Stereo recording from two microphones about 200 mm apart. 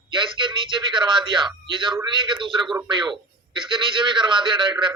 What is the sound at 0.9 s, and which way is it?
A man's voice, 25° right (ahead or behind).